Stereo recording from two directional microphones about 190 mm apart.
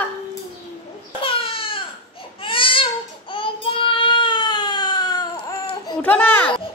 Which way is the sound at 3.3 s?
25° left (ahead or behind).